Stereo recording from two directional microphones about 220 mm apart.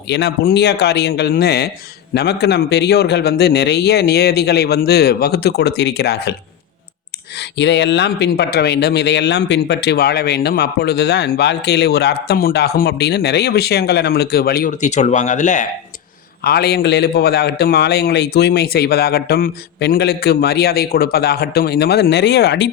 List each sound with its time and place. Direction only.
0.1 s speech: 50° left (ahead or behind)
7.3 s speech: 50° left (ahead or behind); by 15.6 s 35° left (ahead or behind)
16.4 s speech: 45° left (ahead or behind)